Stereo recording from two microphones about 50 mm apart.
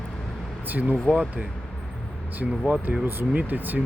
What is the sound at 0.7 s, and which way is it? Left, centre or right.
Speech, right.